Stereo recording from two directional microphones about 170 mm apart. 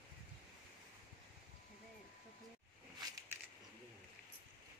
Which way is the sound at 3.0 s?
20° right (ahead or behind).